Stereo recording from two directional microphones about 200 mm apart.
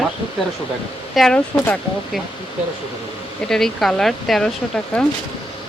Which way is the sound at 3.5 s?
Centre (ahead or behind).